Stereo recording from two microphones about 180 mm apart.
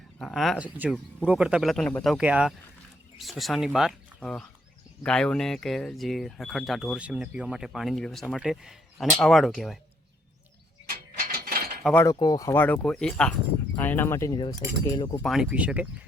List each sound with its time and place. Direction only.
0.2 s speech: centre (ahead or behind)
10.8 s mechanisms: 55° right (ahead or behind)
11.9 s speech: 20° left (ahead or behind)
15.2 s speech: centre (ahead or behind)